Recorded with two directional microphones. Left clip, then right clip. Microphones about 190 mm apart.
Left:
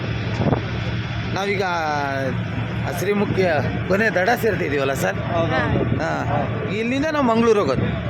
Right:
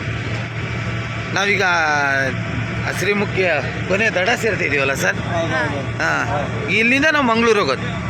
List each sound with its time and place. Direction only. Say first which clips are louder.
1.4 s speech: right 6 dB; 5° left (ahead or behind)
3.3 s speech: right 2 dB; 20° left (ahead or behind)
6.0 s speech: right 4 dB; 10° left (ahead or behind)
7.2 s speech: right 2 dB; 15° left (ahead or behind)